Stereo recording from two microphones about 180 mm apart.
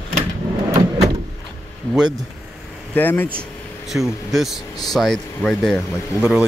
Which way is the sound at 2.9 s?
10° left (ahead or behind).